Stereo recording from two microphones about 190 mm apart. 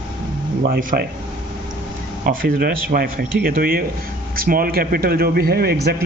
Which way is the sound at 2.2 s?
50° right (ahead or behind).